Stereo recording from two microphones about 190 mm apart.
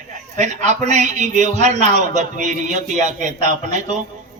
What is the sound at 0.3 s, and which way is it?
A man's voice, 40° right (ahead or behind).